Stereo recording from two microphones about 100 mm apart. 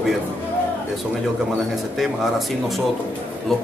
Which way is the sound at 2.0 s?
Centre (ahead or behind).